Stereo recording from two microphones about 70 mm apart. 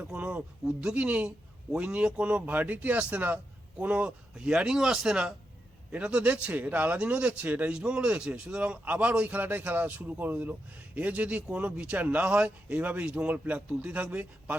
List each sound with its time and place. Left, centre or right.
0.1 s speech: centre